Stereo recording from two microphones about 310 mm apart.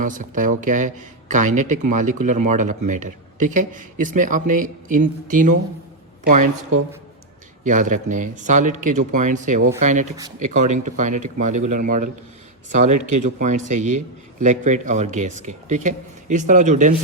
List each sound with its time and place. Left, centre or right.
0.0 s speech: right
7.6 s speech: right
13.2 s speech: right